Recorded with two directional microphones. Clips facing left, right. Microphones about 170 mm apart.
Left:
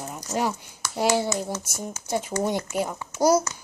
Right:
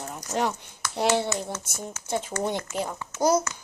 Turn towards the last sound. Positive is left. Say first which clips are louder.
# left 2 dB
turn(degrees=10)  # may be behind; listen again after turning